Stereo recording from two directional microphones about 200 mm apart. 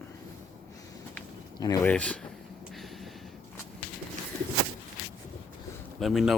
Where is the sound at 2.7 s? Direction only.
Centre (ahead or behind).